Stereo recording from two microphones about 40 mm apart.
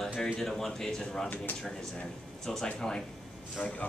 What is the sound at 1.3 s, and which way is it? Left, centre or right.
Speech, left.